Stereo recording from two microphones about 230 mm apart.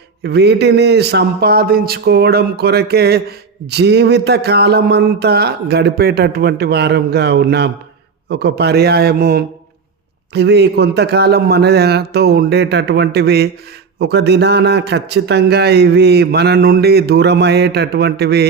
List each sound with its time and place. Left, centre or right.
0.2 s a man's voice: right